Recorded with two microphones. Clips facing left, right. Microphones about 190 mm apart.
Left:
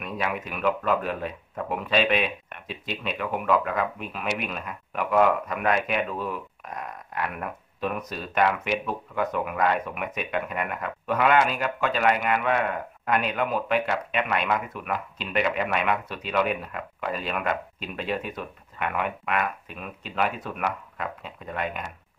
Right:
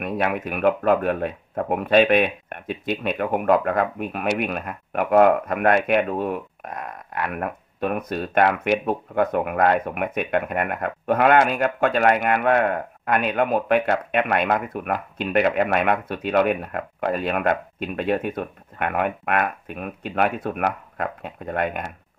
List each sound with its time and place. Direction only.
0.0 s speech: 55° right (ahead or behind)